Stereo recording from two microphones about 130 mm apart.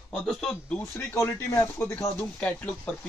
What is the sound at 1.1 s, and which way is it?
Speech, 25° left (ahead or behind).